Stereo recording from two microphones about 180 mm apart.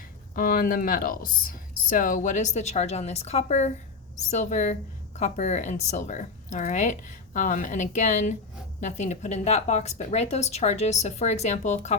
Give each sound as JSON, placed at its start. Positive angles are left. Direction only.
{"t": 0.3, "sound": "speech", "side_deg": 50}